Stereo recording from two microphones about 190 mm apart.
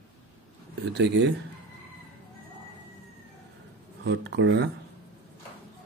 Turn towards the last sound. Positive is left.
turn(degrees=-70)  # may be behind; listen again after turning